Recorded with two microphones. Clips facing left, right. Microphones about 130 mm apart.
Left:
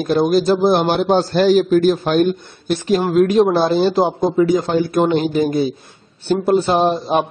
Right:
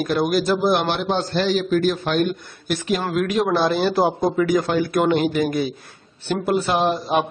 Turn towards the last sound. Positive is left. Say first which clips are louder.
# left 4 dB
turn(degrees=25)  # may be behind; listen again after turning